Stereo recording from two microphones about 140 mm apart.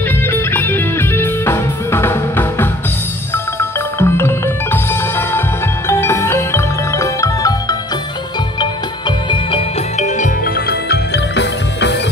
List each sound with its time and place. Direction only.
0.3 s music: 15° left (ahead or behind)
5.9 s music: 20° left (ahead or behind)
9.9 s music: 60° left (ahead or behind)